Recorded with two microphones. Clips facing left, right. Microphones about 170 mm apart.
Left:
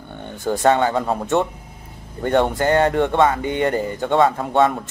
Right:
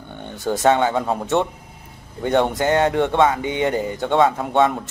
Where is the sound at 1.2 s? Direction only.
10° left (ahead or behind).